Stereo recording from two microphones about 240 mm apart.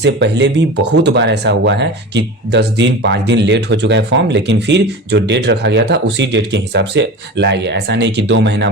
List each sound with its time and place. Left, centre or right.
0.0 s speech: right